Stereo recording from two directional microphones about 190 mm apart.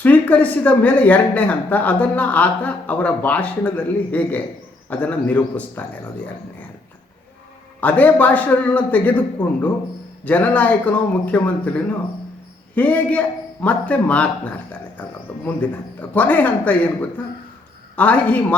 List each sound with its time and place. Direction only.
0.0 s speech: 10° left (ahead or behind)
7.8 s speech: 10° left (ahead or behind)
16.0 s speech: 10° left (ahead or behind)
17.9 s speech: 10° left (ahead or behind)